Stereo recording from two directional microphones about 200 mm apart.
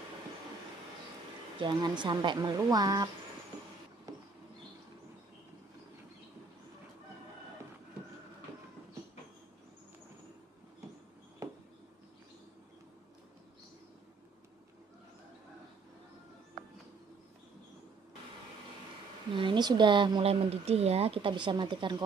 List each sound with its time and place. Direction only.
1.6 s speech: 25° right (ahead or behind)
19.3 s speech: 25° right (ahead or behind)